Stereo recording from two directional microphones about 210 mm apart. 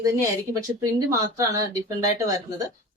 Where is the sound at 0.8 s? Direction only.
15° right (ahead or behind).